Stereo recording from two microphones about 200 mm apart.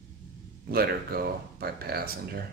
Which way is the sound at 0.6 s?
50° right (ahead or behind).